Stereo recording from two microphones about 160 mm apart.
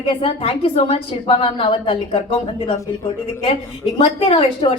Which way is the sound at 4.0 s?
35° left (ahead or behind).